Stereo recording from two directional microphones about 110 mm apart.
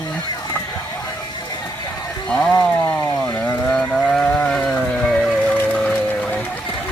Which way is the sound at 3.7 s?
10° left (ahead or behind).